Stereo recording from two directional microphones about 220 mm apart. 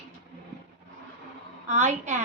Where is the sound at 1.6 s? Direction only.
30° right (ahead or behind).